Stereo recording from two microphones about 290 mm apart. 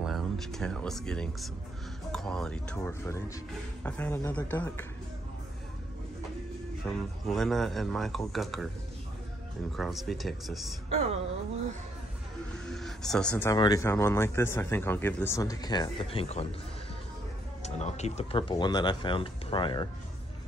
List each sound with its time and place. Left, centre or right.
0.0 s speech: centre
6.9 s speech: centre
9.7 s speech: centre
12.6 s speech: centre
17.6 s speech: left